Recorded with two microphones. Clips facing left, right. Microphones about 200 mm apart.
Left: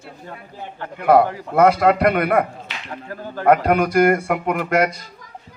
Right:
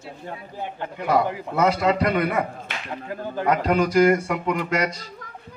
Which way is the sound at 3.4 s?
55° left (ahead or behind).